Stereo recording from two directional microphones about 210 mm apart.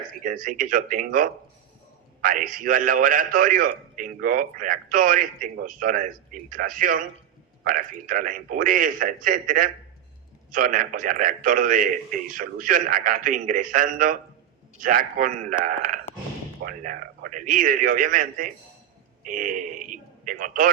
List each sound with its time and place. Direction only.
0.2 s a man's voice: 40° right (ahead or behind)